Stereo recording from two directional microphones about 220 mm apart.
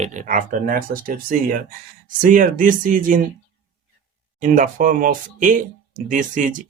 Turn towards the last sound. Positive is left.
turn(degrees=-35)  # may be behind; listen again after turning